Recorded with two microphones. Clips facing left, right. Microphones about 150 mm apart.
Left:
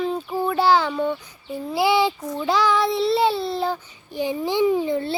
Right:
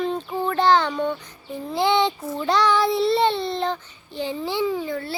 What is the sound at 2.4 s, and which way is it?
Child singing, 5° left (ahead or behind).